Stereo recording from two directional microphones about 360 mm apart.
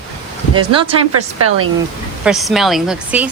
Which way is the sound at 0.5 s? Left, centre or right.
Centre.